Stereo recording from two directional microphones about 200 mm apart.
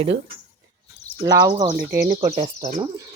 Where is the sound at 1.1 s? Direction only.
35° left (ahead or behind).